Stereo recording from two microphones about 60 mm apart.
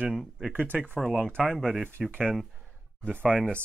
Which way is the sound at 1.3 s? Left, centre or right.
Centre.